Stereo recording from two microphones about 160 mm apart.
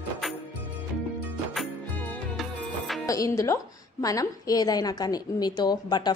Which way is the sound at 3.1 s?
20° left (ahead or behind).